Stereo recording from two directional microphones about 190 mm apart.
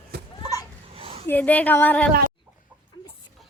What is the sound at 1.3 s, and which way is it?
Speech, 10° left (ahead or behind).